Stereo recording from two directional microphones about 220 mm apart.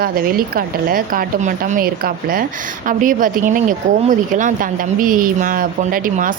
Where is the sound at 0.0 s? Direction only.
40° right (ahead or behind).